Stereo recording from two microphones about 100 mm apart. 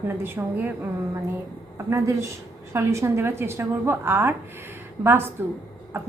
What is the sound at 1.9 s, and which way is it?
A woman's voice, 30° right (ahead or behind).